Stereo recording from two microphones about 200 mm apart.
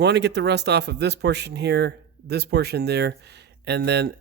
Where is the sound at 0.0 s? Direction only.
60° right (ahead or behind).